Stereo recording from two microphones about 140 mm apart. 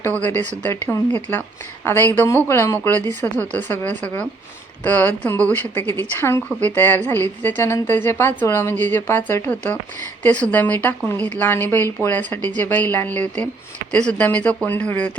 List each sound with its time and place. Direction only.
0.0 s speech: 10° left (ahead or behind)